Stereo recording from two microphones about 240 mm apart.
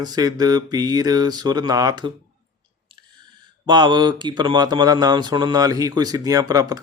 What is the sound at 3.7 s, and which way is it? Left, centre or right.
Speech, centre.